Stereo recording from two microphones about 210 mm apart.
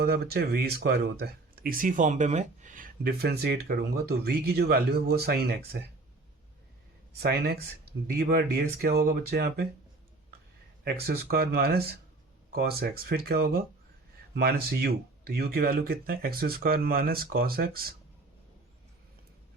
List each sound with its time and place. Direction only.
0.0 s speech: 50° right (ahead or behind)
7.2 s speech: 50° right (ahead or behind)
10.8 s speech: 45° right (ahead or behind)